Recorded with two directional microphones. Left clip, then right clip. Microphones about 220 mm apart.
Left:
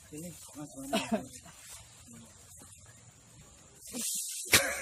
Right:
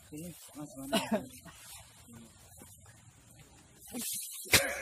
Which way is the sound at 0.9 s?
50° right (ahead or behind).